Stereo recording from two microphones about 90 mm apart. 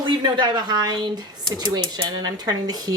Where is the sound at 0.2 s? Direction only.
55° right (ahead or behind).